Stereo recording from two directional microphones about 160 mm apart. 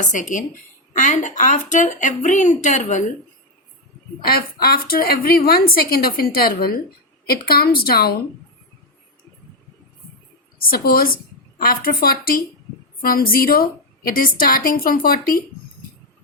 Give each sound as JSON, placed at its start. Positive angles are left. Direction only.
{"t": 0.0, "sound": "speech", "side_deg": 55}
{"t": 4.2, "sound": "a woman's voice", "side_deg": 70}
{"t": 10.7, "sound": "a woman's voice", "side_deg": 70}